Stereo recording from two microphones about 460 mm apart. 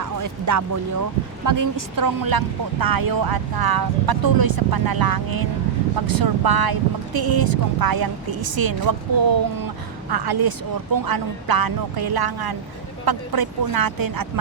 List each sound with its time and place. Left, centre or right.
0.0 s music: right
1.5 s speech: right